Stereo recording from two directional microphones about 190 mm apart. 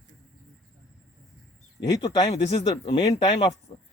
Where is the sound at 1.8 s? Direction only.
20° left (ahead or behind).